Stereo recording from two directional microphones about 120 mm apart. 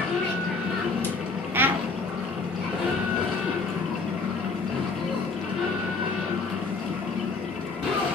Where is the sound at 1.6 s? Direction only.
15° right (ahead or behind).